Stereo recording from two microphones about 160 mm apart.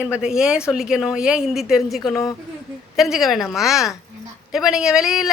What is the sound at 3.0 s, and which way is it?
A woman's voice, centre (ahead or behind).